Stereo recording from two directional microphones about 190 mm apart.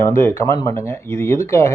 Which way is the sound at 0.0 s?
15° left (ahead or behind).